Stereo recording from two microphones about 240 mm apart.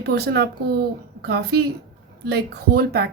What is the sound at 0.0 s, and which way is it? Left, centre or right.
A woman's voice, right.